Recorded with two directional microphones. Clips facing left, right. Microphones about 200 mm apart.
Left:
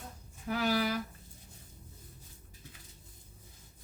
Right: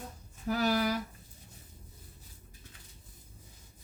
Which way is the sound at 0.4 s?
40° right (ahead or behind).